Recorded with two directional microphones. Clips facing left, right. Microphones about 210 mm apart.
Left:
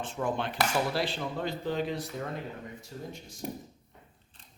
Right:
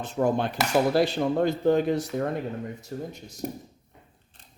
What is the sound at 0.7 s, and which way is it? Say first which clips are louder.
Speech: right 8 dB; 45° right (ahead or behind).